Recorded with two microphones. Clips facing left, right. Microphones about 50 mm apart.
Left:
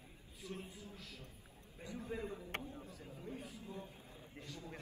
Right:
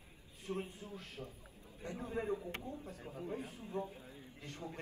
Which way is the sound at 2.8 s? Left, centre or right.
Right.